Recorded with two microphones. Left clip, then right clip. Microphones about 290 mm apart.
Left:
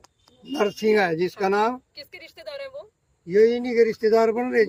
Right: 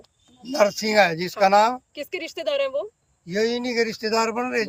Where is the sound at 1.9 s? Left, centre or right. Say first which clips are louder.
Right 11 dB; right.